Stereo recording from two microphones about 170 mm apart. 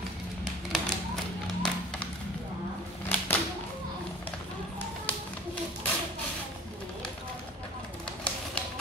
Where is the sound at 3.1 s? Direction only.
10° left (ahead or behind).